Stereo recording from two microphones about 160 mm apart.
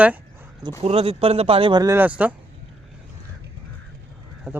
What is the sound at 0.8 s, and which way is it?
Speech, 35° right (ahead or behind).